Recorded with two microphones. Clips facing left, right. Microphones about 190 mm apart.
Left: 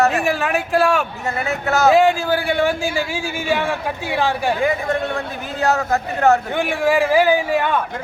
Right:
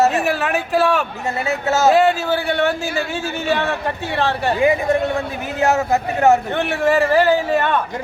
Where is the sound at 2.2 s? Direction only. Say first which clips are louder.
Even; 10° left (ahead or behind).